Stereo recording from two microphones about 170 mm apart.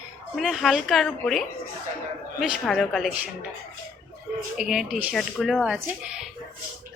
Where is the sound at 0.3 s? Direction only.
Centre (ahead or behind).